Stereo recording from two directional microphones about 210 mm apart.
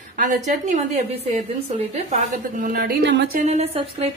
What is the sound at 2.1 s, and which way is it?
A woman's voice, 40° right (ahead or behind).